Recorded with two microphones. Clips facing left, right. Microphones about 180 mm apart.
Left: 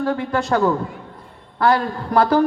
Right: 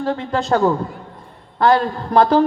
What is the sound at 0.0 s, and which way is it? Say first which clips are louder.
A woman's voice: even; 25° right (ahead or behind).